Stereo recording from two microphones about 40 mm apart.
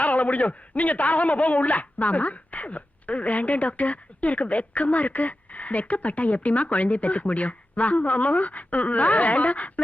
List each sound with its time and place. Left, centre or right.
0.0 s a man's voice: left